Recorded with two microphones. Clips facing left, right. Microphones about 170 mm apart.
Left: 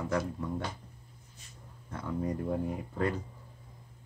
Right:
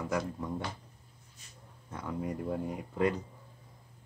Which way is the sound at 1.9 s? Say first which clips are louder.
Left 2 dB; 15° right (ahead or behind).